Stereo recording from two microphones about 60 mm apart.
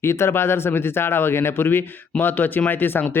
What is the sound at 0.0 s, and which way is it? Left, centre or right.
Speech, left.